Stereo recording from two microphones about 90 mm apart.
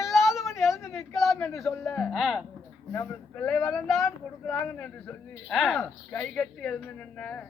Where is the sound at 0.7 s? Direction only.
35° left (ahead or behind).